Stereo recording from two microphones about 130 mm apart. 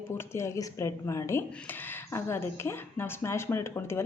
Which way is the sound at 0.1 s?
20° left (ahead or behind).